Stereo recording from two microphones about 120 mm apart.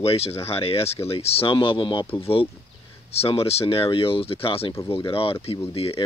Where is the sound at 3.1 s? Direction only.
55° left (ahead or behind).